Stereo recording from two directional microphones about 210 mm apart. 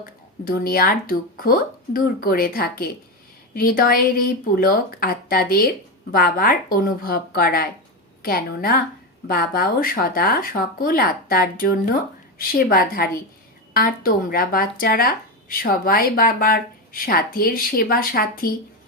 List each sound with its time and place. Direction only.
0.0 s speech: 45° left (ahead or behind)